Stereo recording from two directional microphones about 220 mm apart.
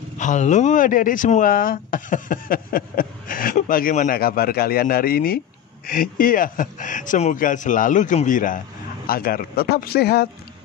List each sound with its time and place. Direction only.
0.2 s speech: 35° left (ahead or behind)